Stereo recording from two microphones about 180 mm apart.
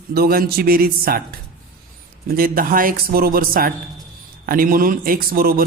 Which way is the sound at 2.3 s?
55° right (ahead or behind).